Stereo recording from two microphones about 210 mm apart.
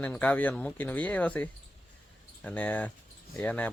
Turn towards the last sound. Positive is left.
turn(degrees=5)  # may be behind; listen again after turning